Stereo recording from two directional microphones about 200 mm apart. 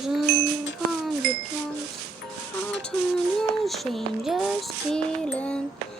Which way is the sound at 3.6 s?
Centre (ahead or behind).